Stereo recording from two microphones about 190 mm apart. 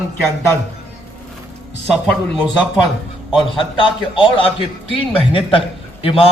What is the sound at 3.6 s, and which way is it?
A man's voice, 25° left (ahead or behind).